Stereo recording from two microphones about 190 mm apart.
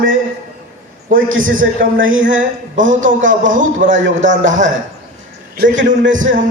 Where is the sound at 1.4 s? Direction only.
45° right (ahead or behind).